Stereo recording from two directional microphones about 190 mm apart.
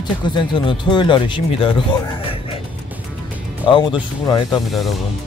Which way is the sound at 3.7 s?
25° left (ahead or behind).